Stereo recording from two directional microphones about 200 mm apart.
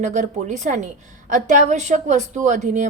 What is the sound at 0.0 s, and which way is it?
A woman's voice, 35° right (ahead or behind).